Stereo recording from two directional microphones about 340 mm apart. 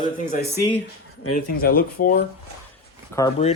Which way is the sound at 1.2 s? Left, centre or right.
Left.